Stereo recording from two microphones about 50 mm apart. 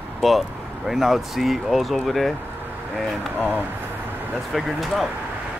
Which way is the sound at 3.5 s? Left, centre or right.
Right.